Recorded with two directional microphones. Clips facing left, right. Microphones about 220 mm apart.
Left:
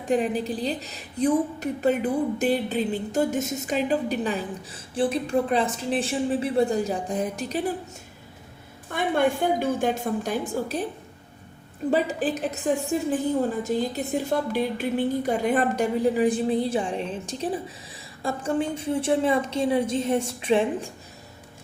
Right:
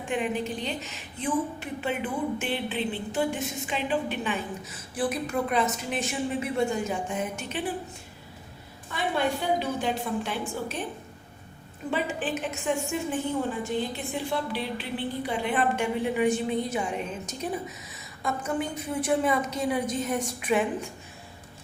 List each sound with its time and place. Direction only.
0.0 s a woman's voice: 35° left (ahead or behind)
8.9 s a woman's voice: 50° left (ahead or behind)
11.9 s a woman's voice: 40° left (ahead or behind)